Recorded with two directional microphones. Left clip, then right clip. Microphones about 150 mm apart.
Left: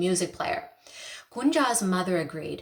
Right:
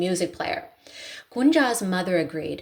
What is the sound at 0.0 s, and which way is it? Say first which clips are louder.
A woman's voice: right 2 dB; 20° right (ahead or behind).